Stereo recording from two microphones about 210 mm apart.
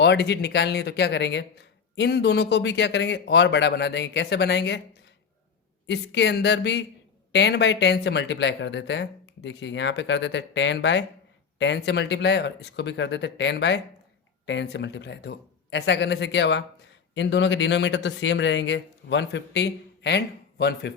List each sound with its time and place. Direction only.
0.0 s speech: 50° left (ahead or behind)
5.9 s a man's voice: 55° left (ahead or behind)